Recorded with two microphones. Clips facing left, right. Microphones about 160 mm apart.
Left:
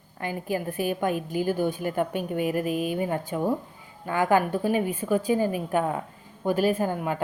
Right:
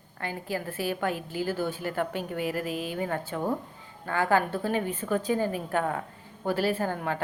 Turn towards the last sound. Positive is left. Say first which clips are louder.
# left 3 dB
turn(degrees=15)  # may be behind; listen again after turning